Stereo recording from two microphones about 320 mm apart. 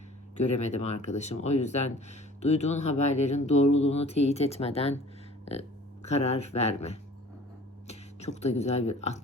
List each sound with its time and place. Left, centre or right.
0.3 s speech: left